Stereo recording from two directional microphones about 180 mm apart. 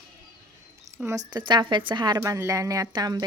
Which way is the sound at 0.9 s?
15° right (ahead or behind).